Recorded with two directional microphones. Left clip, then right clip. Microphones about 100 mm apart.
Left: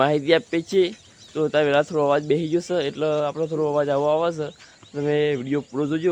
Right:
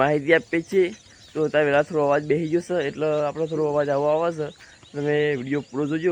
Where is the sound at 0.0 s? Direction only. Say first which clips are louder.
Even; 25° left (ahead or behind).